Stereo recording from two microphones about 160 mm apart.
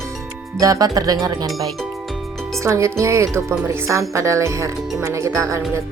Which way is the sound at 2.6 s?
20° right (ahead or behind).